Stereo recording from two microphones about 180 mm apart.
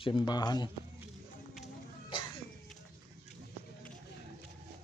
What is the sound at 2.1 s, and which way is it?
Music, 25° left (ahead or behind).